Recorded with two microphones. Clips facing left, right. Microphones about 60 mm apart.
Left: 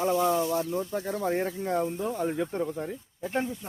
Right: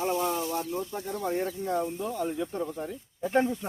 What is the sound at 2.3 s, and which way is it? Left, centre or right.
Speech, left.